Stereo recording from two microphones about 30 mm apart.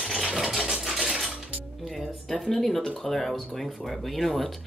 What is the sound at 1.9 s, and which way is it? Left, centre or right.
Speech, centre.